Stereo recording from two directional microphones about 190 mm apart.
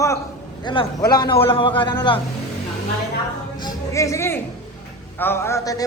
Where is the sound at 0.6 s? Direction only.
20° left (ahead or behind).